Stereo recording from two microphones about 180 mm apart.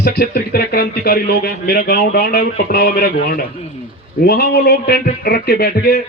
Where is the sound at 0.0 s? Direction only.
60° left (ahead or behind).